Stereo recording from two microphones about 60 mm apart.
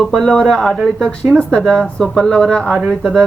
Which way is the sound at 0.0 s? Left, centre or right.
Centre.